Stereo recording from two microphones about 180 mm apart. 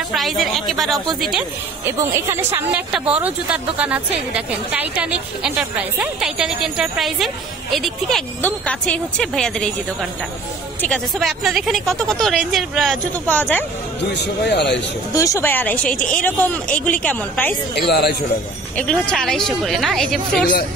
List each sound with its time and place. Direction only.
0.1 s speech: centre (ahead or behind)
1.9 s speech: 15° right (ahead or behind); by 9.7 s 5° left (ahead or behind)
10.8 s speech: centre (ahead or behind)
14.5 s a man's voice: 70° left (ahead or behind)
15.1 s speech: 15° left (ahead or behind)
17.7 s speech: 65° left (ahead or behind)
18.8 s speech: 5° left (ahead or behind)